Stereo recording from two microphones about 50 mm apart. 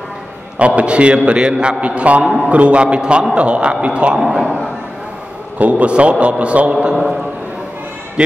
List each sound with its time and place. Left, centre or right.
0.6 s a man's voice: right
4.2 s a man's voice: centre
5.6 s a man's voice: right